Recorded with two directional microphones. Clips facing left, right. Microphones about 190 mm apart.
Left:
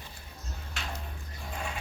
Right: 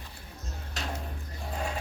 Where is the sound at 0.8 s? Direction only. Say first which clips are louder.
Right 4 dB; 40° right (ahead or behind).